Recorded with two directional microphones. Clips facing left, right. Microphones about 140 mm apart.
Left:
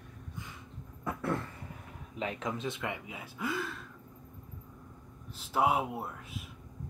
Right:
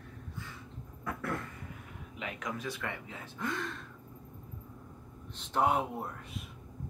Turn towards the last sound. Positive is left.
turn(degrees=5)  # may be behind; listen again after turning